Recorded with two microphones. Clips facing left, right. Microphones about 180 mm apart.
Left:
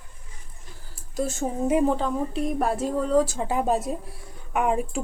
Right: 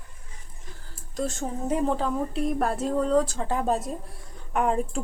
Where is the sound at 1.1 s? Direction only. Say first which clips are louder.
Left 3 dB; 5° left (ahead or behind).